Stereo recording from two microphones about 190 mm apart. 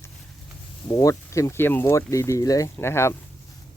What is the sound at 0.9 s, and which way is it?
Speech, 15° left (ahead or behind).